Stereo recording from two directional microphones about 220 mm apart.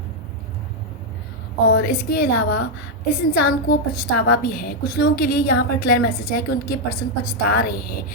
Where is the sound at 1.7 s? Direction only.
45° left (ahead or behind).